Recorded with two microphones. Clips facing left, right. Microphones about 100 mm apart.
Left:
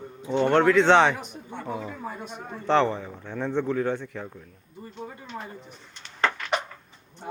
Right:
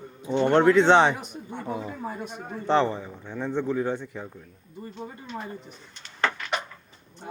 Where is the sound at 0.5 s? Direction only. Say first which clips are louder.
Right 1 dB; 35° right (ahead or behind).